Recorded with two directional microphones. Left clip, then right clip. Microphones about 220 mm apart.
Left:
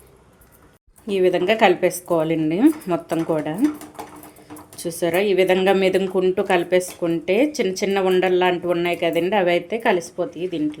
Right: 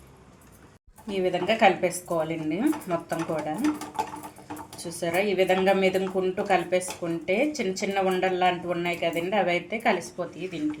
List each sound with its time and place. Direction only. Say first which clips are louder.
1.1 s a woman's voice: left 7 dB; 45° left (ahead or behind)
4.8 s a woman's voice: left 6 dB; 45° left (ahead or behind)